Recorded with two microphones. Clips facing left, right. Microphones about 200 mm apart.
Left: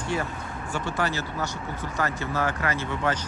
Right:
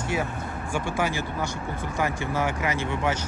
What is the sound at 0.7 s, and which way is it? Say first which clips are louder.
Speech: right 1 dB; 10° right (ahead or behind).